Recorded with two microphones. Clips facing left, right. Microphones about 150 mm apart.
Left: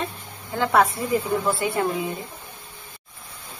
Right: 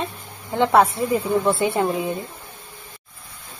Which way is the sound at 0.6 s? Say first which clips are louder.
Right 3 dB; 25° right (ahead or behind).